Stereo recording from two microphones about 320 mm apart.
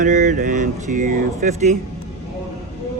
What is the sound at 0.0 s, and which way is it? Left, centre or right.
Speech, right.